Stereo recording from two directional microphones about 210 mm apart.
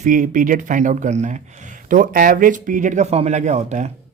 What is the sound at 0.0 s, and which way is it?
Speech, 40° right (ahead or behind).